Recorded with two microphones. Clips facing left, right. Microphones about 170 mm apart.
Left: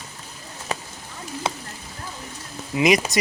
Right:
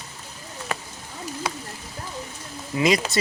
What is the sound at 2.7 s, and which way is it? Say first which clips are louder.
Speech: left 2 dB; 20° left (ahead or behind).